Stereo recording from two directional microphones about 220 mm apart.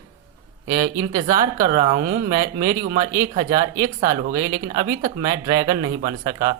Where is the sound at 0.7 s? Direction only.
40° right (ahead or behind).